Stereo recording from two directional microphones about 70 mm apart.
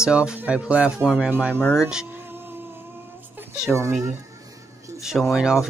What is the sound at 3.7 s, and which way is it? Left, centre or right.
Speech, right.